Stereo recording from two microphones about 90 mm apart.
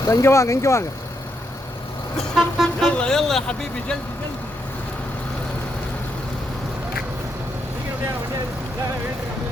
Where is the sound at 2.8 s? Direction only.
10° left (ahead or behind).